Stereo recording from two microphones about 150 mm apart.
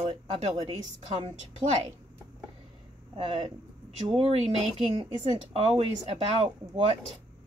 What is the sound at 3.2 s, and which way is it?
Speech, 40° right (ahead or behind).